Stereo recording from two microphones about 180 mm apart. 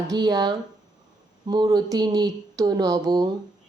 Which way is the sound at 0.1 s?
20° right (ahead or behind).